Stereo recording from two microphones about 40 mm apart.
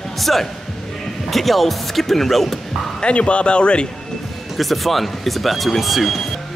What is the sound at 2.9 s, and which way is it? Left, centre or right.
Speech, left.